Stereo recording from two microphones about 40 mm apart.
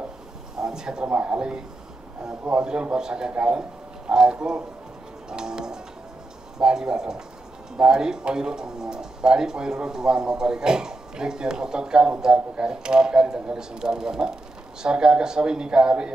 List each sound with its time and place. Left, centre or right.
0.6 s a sound: centre
1.0 s speech: right
5.3 s music: centre
6.6 s speech: centre